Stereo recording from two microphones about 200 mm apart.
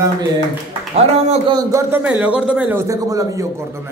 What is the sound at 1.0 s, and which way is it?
A man's voice, 30° right (ahead or behind).